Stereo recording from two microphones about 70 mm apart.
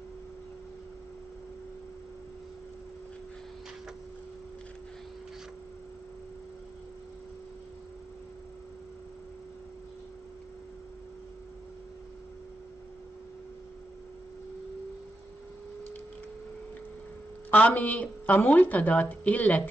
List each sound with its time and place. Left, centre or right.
17.5 s a woman's voice: left